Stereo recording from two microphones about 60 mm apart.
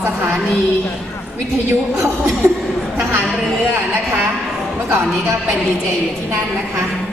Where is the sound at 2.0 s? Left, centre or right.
Right.